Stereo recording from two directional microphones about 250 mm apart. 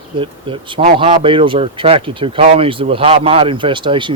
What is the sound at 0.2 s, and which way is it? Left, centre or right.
Speech, right.